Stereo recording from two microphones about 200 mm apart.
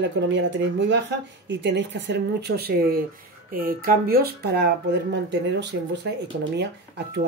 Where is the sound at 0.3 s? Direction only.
65° right (ahead or behind).